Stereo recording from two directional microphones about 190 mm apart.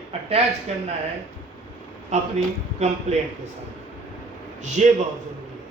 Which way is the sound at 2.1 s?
40° right (ahead or behind).